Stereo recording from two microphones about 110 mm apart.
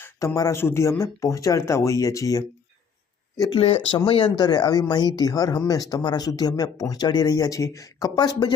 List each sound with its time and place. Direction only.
0.0 s speech: 30° left (ahead or behind)
3.9 s speech: 50° left (ahead or behind)